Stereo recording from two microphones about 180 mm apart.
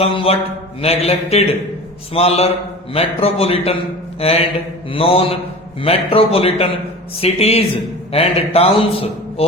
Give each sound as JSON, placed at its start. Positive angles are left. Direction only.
{"t": 0.0, "sound": "a man's voice", "side_deg": 30}